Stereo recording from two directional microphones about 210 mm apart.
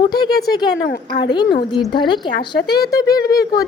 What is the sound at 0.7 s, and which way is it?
Speech, 50° left (ahead or behind).